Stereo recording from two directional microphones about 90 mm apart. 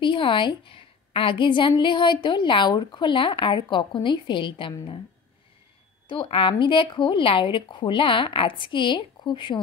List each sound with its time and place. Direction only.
0.0 s a woman's voice: 70° left (ahead or behind)
6.0 s speech: 80° left; by 9.6 s 60° left (ahead or behind)